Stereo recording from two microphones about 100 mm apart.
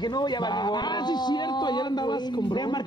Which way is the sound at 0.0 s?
45° left (ahead or behind).